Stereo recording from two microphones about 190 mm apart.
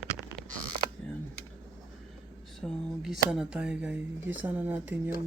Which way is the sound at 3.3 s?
5° right (ahead or behind).